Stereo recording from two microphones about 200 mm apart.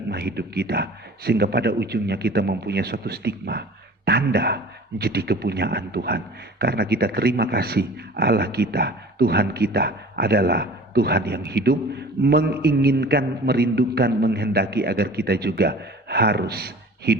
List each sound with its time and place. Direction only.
0.1 s a man's voice: 55° right (ahead or behind)